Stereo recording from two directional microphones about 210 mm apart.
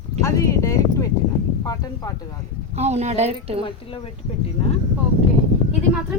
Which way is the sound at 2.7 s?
30° right (ahead or behind).